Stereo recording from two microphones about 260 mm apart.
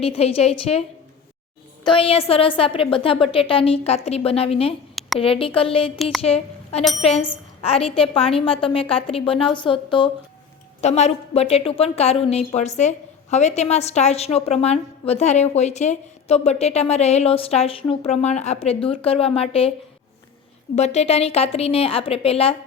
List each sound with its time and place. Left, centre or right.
0.0 s a woman's voice: left
4.9 s a sound: centre
5.2 s a woman's voice: left
6.0 s speech: centre
6.2 s a woman's voice: left
20.7 s a woman's voice: left